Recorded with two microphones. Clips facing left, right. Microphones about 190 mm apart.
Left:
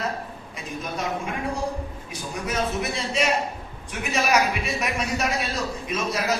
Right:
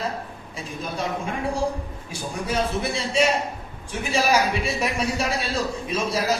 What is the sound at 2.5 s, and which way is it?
A man's voice, 30° right (ahead or behind).